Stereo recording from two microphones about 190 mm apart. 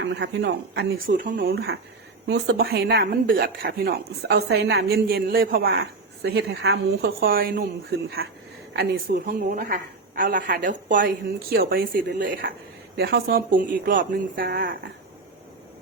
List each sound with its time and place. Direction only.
0.2 s speech: 60° right (ahead or behind)
2.2 s a woman's voice: 70° right (ahead or behind); by 12.5 s 45° right (ahead or behind)
13.0 s a woman's voice: 55° right (ahead or behind)